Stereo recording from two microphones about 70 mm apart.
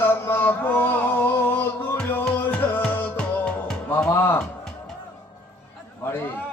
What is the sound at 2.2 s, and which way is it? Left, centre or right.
Music, left.